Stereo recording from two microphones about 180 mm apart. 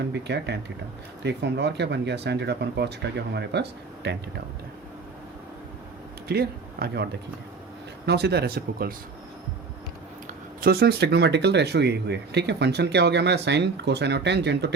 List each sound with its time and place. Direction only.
0.0 s speech: 70° right (ahead or behind)
6.2 s speech: 60° right (ahead or behind)
10.2 s speech: 55° right (ahead or behind)